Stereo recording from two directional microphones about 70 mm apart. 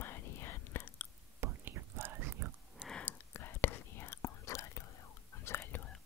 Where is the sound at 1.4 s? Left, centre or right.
Right.